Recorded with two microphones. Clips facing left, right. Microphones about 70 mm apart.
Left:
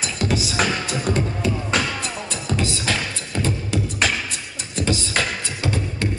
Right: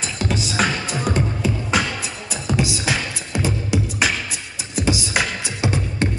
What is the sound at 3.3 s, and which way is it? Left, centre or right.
Music, centre.